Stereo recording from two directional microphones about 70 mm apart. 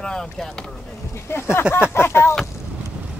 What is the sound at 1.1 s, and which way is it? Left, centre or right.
Speech, left.